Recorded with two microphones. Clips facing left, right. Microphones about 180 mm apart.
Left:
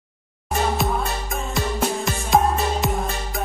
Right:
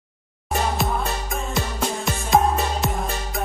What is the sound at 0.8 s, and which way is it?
Music, centre (ahead or behind).